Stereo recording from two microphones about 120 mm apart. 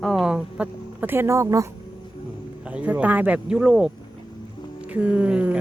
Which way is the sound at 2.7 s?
10° right (ahead or behind).